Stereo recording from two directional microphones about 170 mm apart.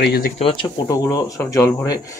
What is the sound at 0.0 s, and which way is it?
Speech, 70° left (ahead or behind).